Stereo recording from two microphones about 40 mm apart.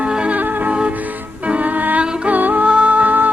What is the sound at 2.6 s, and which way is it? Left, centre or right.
Music, right.